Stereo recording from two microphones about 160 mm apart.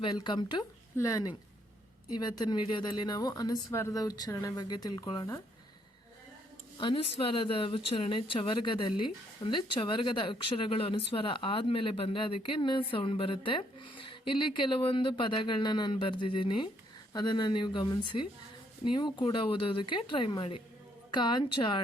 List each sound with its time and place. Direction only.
0.0 s a woman's voice: 30° left (ahead or behind)
6.7 s a woman's voice: 35° left (ahead or behind)